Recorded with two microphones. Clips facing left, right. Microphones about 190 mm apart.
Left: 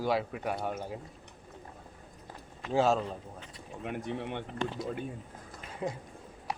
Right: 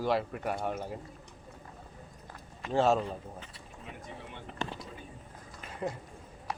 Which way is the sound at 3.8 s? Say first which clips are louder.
Left 10 dB; 70° left (ahead or behind).